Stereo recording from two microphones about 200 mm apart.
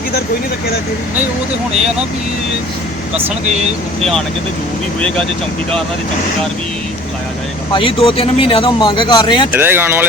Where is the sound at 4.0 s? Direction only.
Centre (ahead or behind).